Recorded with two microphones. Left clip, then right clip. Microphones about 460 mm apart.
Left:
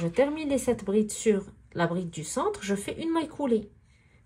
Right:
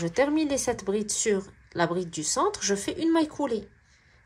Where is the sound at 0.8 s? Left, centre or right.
Centre.